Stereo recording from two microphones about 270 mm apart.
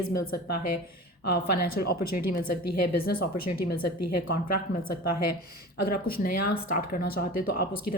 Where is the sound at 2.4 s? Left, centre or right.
Left.